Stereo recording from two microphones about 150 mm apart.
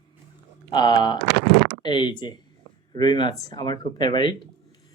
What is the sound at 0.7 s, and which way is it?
Speech, 30° left (ahead or behind).